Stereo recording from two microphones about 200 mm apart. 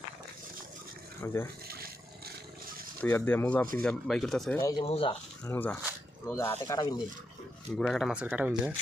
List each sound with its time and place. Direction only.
1.2 s speech: 10° left (ahead or behind)
1.6 s a sound: 50° right (ahead or behind)
3.0 s speech: 10° left (ahead or behind)
4.6 s speech: 20° left (ahead or behind)
5.5 s speech: 10° left (ahead or behind)
7.8 s speech: centre (ahead or behind)